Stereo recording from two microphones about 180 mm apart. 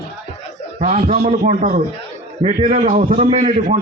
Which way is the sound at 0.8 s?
45° right (ahead or behind).